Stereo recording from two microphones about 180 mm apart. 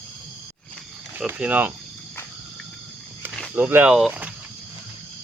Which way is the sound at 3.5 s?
10° right (ahead or behind).